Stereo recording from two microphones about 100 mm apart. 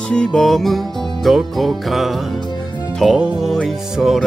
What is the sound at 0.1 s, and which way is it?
Music, 10° left (ahead or behind).